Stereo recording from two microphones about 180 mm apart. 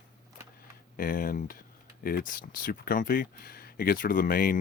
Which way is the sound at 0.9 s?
50° left (ahead or behind).